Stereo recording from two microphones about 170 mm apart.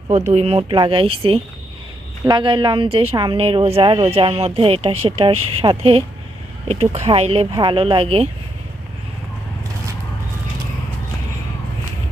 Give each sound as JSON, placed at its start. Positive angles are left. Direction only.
{"t": 0.1, "sound": "a woman's voice", "side_deg": -40}